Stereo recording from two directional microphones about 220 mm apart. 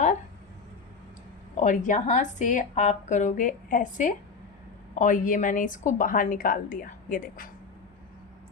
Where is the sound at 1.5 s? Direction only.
35° left (ahead or behind).